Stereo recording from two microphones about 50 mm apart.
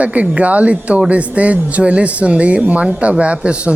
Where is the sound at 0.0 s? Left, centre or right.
Right.